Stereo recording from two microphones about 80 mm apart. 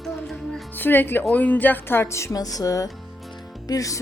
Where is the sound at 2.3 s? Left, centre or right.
Left.